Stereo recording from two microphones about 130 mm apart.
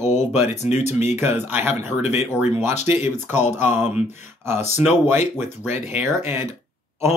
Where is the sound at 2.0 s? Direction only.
60° left (ahead or behind).